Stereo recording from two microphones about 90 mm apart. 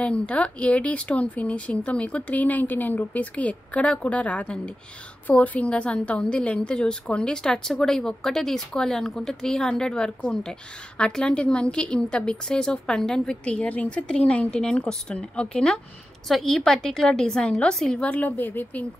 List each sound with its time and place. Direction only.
0.0 s a woman's voice: 15° left (ahead or behind)
18.0 s a woman's voice: 15° left (ahead or behind)